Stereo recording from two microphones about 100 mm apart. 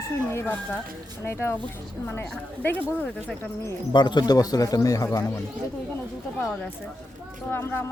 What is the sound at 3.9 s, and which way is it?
A man's voice, 50° left (ahead or behind).